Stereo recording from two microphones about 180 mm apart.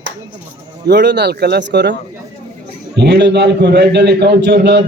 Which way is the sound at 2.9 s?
70° right (ahead or behind).